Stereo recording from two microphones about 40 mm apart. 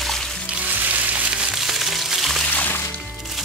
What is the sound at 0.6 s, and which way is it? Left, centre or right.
Music, right.